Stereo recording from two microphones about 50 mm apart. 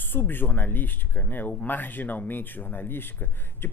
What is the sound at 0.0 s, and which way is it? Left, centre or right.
A woman's voice, left.